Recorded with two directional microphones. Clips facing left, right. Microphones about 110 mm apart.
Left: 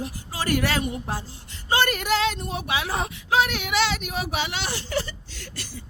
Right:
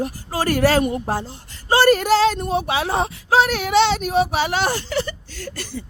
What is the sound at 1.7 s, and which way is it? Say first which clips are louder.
Speech: right 8 dB; 35° right (ahead or behind).